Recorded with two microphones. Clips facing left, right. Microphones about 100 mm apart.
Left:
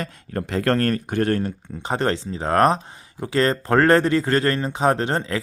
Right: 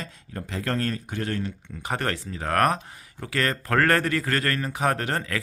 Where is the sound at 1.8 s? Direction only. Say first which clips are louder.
Left 6 dB; 25° left (ahead or behind).